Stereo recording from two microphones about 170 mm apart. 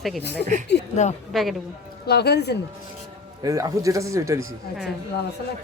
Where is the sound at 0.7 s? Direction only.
80° left.